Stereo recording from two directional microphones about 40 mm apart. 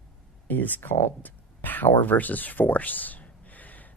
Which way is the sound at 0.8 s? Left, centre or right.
Left.